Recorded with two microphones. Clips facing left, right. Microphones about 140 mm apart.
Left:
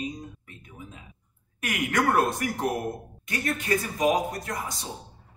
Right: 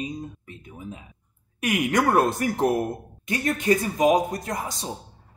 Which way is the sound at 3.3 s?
20° right (ahead or behind).